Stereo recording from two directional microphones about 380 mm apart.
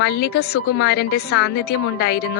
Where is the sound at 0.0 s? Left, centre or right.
Left.